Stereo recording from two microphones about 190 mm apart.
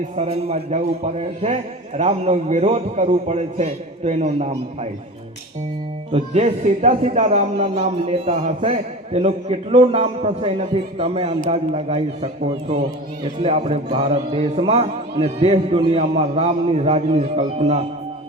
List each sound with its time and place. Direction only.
0.2 s speech: 35° right (ahead or behind)
6.1 s speech: 30° right (ahead or behind)